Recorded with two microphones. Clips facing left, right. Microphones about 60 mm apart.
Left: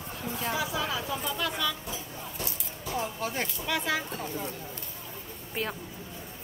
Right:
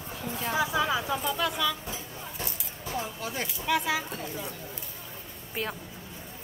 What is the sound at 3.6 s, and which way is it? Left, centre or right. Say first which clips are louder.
Speech: right 4 dB; centre.